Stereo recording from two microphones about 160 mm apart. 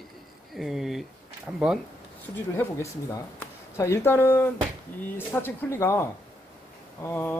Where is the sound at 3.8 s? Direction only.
15° left (ahead or behind).